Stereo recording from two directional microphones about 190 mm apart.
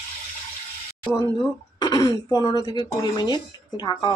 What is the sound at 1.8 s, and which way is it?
Speech, 20° left (ahead or behind).